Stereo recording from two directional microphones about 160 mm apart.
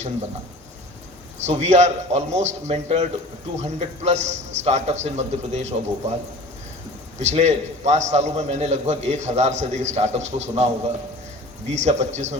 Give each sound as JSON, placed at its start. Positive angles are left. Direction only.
{"t": 1.5, "sound": "a man's voice", "side_deg": -45}
{"t": 7.2, "sound": "a man's voice", "side_deg": -45}
{"t": 11.7, "sound": "a man's voice", "side_deg": -45}